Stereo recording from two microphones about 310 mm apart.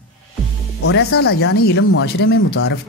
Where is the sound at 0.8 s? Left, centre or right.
Left.